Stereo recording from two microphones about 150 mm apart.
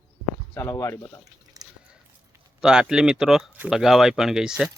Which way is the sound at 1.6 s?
25° right (ahead or behind).